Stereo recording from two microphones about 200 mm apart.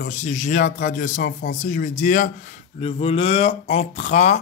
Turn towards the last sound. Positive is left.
turn(degrees=35)  # may be behind; listen again after turning